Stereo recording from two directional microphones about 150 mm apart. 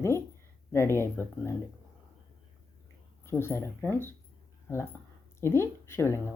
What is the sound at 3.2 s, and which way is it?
Speech, 15° left (ahead or behind).